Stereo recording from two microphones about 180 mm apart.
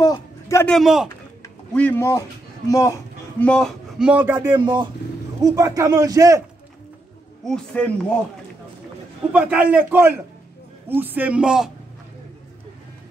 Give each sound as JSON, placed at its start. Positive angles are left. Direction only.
{"t": 0.0, "sound": "a sound", "side_deg": 20}
{"t": 0.7, "sound": "a man's voice", "side_deg": 0}
{"t": 1.0, "sound": "a sound", "side_deg": 10}
{"t": 2.7, "sound": "a man's voice", "side_deg": 15}
{"t": 4.5, "sound": "speech", "side_deg": -25}
{"t": 7.4, "sound": "a man's voice", "side_deg": 5}
{"t": 9.3, "sound": "a man's voice", "side_deg": -10}